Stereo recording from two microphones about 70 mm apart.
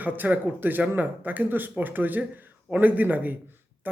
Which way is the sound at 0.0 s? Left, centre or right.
Right.